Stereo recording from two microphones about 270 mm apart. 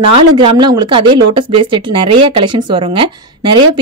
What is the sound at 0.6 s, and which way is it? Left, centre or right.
Speech, centre.